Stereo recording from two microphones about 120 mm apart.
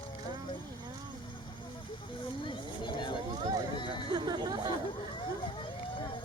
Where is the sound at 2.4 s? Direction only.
45° left (ahead or behind).